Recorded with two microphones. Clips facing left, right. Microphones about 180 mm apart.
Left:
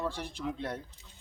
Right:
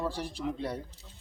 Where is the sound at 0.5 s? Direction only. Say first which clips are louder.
Right 2 dB; 10° right (ahead or behind).